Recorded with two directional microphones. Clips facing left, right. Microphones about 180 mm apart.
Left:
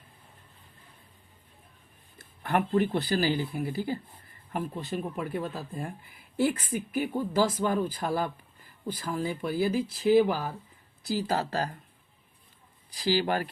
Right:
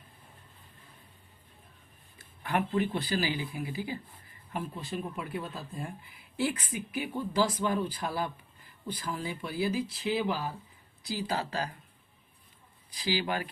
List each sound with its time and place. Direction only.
2.4 s speech: 45° left (ahead or behind)
13.0 s speech: 45° left (ahead or behind)